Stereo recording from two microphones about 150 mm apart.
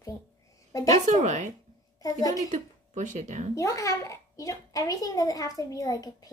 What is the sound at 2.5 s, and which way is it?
Speech, 55° right (ahead or behind).